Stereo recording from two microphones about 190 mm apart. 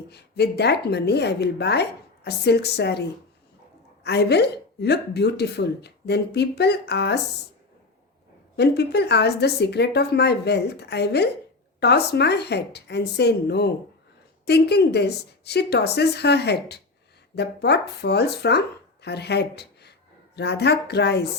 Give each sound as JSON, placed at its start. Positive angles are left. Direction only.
{"t": 0.1, "sound": "speech", "side_deg": 60}
{"t": 8.5, "sound": "speech", "side_deg": 60}